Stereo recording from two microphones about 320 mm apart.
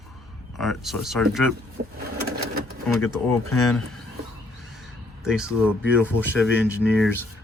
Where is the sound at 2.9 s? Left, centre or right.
Centre.